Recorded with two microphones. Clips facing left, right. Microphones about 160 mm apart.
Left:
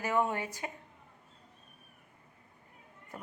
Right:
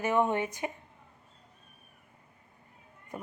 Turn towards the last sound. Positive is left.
turn(degrees=-15)  # may be behind; listen again after turning